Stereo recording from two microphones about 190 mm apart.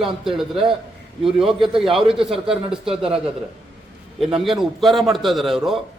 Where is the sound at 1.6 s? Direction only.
25° right (ahead or behind).